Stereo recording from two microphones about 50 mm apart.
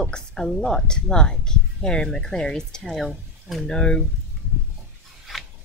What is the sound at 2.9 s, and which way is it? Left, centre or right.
Speech, centre.